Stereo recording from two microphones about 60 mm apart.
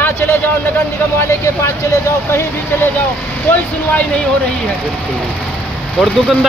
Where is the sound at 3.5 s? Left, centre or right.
Left.